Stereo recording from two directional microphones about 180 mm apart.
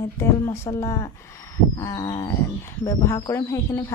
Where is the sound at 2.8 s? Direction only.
15° left (ahead or behind).